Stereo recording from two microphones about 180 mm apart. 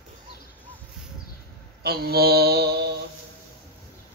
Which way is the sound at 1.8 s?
60° right (ahead or behind).